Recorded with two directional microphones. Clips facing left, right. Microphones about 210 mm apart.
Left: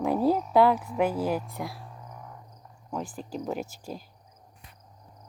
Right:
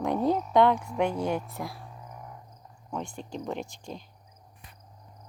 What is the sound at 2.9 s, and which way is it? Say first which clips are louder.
A woman's voice: left 1 dB; 5° left (ahead or behind).